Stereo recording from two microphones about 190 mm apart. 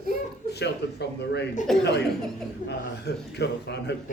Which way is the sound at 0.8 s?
65° left (ahead or behind).